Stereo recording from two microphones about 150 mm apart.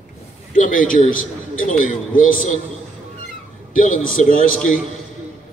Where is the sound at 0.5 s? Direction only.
65° left (ahead or behind).